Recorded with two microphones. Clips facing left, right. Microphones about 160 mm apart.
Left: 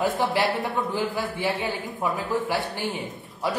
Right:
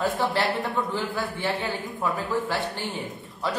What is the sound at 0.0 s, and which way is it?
Speech, 20° left (ahead or behind).